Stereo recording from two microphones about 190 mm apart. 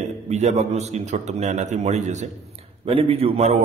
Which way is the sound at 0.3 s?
35° right (ahead or behind).